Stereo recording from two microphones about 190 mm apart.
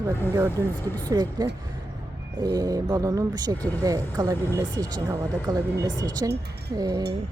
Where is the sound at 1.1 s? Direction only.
20° right (ahead or behind).